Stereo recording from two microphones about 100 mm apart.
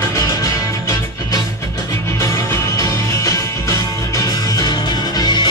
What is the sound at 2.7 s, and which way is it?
Music, 35° left (ahead or behind).